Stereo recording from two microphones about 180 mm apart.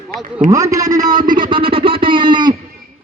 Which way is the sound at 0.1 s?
55° right (ahead or behind).